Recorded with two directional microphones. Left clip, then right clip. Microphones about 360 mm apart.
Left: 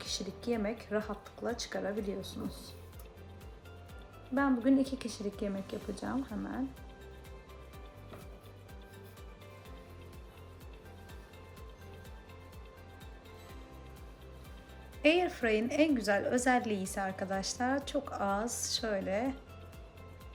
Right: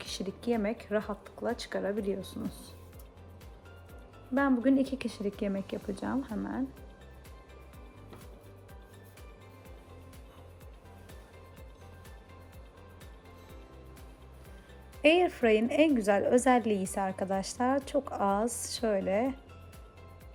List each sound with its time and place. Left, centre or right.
0.0 s speech: centre
2.2 s speech: right
4.4 s speech: centre
15.0 s a woman's voice: centre